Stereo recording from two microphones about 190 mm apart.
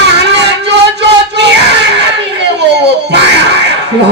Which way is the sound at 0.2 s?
65° right (ahead or behind).